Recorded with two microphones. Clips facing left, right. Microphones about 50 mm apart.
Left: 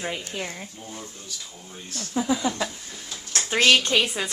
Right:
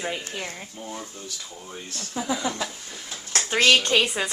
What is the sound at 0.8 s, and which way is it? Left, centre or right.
Speech, right.